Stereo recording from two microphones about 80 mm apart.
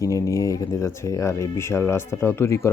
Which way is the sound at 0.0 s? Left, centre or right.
Left.